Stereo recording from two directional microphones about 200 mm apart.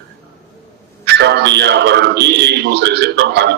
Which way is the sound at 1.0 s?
55° right (ahead or behind).